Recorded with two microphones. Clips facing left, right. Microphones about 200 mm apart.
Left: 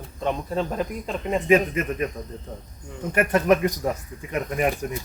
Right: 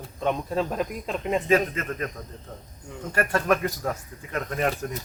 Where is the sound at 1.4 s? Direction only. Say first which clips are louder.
Left 6 dB; 15° left (ahead or behind).